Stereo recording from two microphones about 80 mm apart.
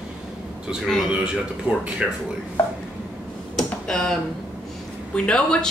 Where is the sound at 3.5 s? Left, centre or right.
Centre.